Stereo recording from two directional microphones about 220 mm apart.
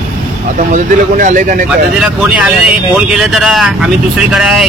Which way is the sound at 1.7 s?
5° right (ahead or behind).